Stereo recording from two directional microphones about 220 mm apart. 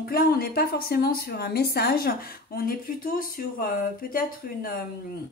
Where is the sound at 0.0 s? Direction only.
40° left (ahead or behind).